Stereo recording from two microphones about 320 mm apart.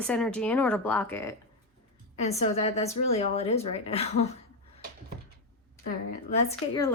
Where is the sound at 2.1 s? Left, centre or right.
Centre.